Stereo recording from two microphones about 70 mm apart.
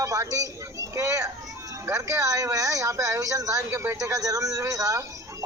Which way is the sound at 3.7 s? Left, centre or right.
Right.